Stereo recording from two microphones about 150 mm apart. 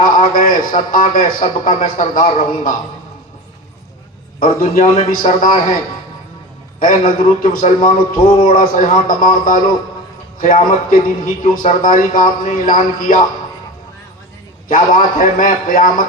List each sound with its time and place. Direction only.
0.0 s speech: 65° left (ahead or behind)
4.4 s a man's voice: 70° left (ahead or behind)
14.7 s speech: 65° left (ahead or behind)